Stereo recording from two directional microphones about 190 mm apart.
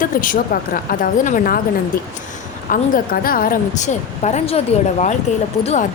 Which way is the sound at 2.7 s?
45° left (ahead or behind).